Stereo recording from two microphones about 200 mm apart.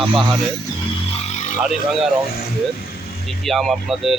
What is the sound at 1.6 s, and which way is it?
Speech, centre (ahead or behind).